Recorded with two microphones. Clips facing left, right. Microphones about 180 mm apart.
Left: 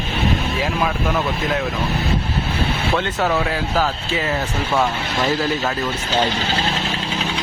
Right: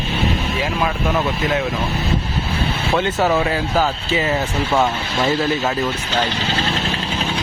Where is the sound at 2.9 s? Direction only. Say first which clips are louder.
Right 4 dB; 5° right (ahead or behind).